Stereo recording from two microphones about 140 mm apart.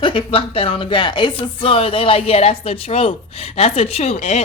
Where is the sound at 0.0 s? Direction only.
40° left (ahead or behind).